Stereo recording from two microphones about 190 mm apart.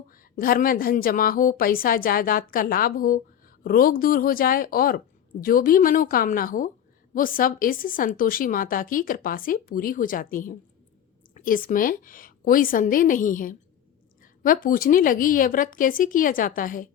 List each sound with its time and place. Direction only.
0.1 s a woman's voice: 50° left (ahead or behind)